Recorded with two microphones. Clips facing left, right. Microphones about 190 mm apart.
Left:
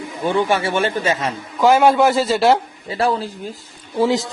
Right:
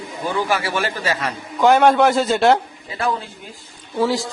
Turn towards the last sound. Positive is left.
turn(degrees=20)  # may be behind; listen again after turning